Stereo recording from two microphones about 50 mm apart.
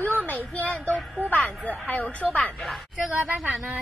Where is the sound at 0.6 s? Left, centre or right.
Left.